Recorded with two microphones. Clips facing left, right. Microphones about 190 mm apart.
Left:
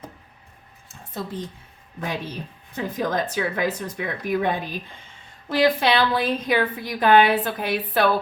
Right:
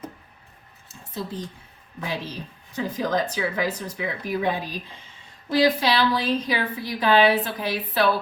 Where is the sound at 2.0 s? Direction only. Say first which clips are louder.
Left 1 dB; 50° left (ahead or behind).